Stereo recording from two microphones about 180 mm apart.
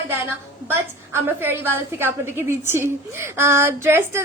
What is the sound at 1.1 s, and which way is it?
A woman's voice, 15° right (ahead or behind).